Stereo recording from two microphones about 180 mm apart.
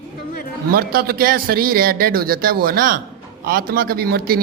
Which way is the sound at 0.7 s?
55° right (ahead or behind).